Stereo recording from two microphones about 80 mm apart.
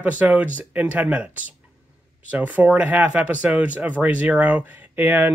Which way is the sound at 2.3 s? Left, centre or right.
Centre.